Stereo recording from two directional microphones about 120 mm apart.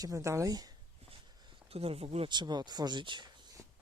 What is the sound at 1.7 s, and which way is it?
Speech, 55° right (ahead or behind).